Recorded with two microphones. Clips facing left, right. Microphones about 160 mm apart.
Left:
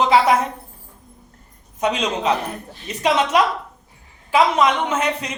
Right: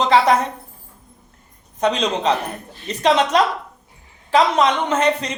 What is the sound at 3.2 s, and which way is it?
Speech, 35° right (ahead or behind).